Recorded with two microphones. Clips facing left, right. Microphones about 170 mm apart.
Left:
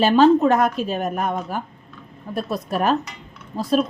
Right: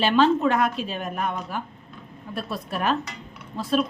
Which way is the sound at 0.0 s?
40° left (ahead or behind).